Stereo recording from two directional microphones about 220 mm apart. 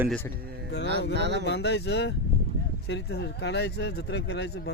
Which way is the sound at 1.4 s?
50° left (ahead or behind).